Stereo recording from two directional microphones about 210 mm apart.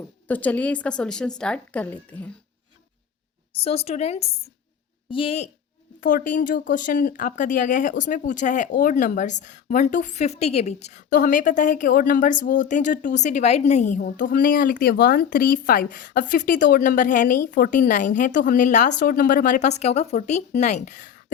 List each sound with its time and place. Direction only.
0.3 s a woman's voice: 5° left (ahead or behind)
3.6 s a woman's voice: 30° left (ahead or behind)
6.0 s speech: 40° left (ahead or behind)